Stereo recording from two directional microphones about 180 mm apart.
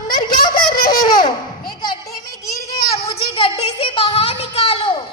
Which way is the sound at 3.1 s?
30° left (ahead or behind).